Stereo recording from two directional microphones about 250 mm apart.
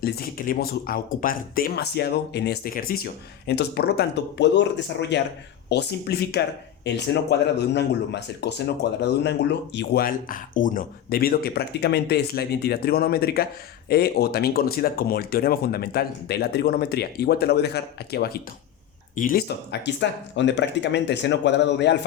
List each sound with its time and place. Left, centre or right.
0.0 s speech: left